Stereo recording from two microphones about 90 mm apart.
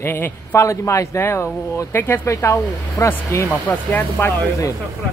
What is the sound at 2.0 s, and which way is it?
Speech, 20° left (ahead or behind).